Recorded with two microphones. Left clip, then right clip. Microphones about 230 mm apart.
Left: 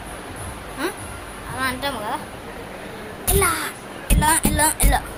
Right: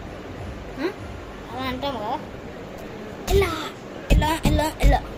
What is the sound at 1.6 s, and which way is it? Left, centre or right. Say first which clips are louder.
Speech: left 3 dB; centre.